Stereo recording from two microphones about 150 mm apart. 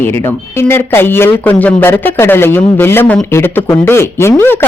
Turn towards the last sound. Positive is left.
turn(degrees=15)  # may be behind; listen again after turning